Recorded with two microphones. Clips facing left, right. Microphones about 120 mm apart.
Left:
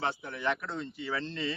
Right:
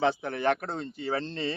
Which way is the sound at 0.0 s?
80° right.